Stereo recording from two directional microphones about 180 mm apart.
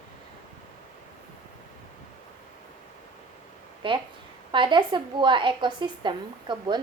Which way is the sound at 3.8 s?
30° right (ahead or behind).